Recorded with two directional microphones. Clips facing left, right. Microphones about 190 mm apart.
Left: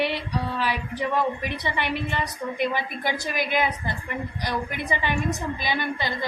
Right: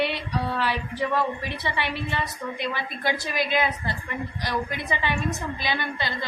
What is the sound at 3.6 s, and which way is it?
Speech, 15° left (ahead or behind).